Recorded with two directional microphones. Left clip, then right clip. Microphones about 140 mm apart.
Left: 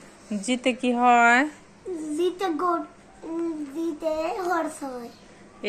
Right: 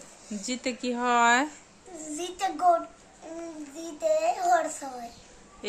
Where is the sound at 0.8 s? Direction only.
5° right (ahead or behind).